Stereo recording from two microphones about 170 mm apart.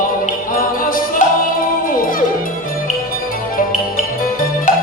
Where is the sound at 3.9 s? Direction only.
55° left (ahead or behind).